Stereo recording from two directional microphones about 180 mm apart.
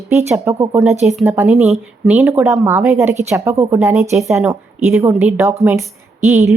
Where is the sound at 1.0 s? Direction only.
Centre (ahead or behind).